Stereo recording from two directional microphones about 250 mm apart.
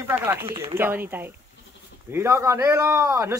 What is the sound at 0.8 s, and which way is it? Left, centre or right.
A man's voice, centre.